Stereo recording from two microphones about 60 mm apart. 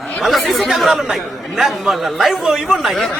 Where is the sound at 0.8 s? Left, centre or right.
Centre.